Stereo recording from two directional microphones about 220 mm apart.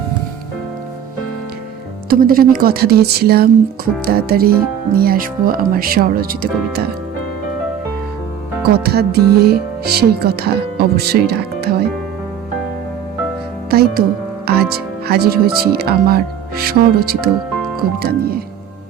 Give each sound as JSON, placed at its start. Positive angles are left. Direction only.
{"t": 2.0, "sound": "speech", "side_deg": -40}
{"t": 8.8, "sound": "speech", "side_deg": -45}
{"t": 13.7, "sound": "speech", "side_deg": -45}